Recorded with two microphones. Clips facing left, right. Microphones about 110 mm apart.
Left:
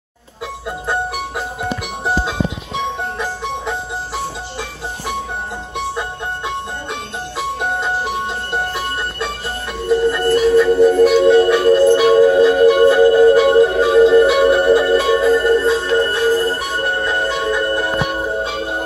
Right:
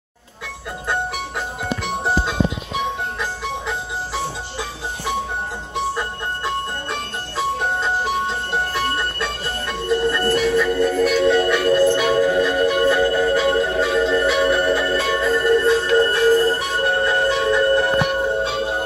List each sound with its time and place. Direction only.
0.8 s jingle bell: 10° left (ahead or behind)
5.9 s music: 5° left (ahead or behind)
10.3 s music: 30° left (ahead or behind)
15.6 s music: 10° left (ahead or behind)
16.5 s music: 5° left (ahead or behind)